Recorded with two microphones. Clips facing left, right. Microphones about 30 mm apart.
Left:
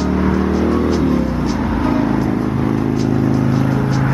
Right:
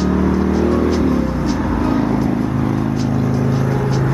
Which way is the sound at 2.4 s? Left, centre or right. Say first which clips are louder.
Left 1 dB; left.